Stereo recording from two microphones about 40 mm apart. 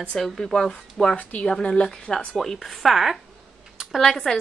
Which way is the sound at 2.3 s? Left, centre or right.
Centre.